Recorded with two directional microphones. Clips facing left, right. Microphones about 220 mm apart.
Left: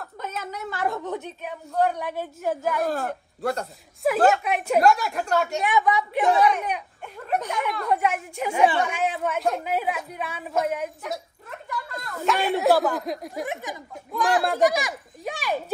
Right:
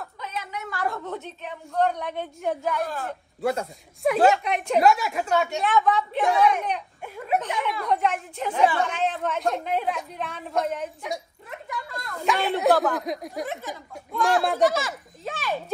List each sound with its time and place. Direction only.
0.2 s a sound: 45° left (ahead or behind)
0.7 s a woman's voice: 20° left (ahead or behind); by 2.8 s 5° left (ahead or behind)
2.8 s a man's voice: 45° left (ahead or behind)
3.3 s a woman's voice: centre (ahead or behind)
5.6 s a woman's voice: 15° left (ahead or behind)
7.2 s a woman's voice: 5° right (ahead or behind)
13.5 s a woman's voice: 15° left (ahead or behind)
14.1 s a woman's voice: centre (ahead or behind)
14.6 s a woman's voice: 15° left (ahead or behind)